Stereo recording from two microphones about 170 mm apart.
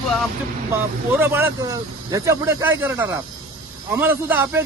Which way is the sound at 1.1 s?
15° right (ahead or behind).